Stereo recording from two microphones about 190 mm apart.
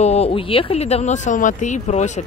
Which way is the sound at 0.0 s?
35° left (ahead or behind).